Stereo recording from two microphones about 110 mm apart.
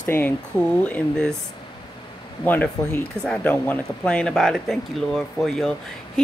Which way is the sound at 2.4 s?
15° left (ahead or behind).